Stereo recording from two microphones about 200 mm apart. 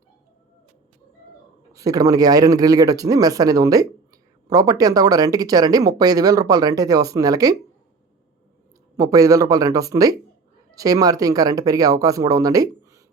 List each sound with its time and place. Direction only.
1.7 s a man's voice: 15° right (ahead or behind)
9.0 s a man's voice: 15° right (ahead or behind)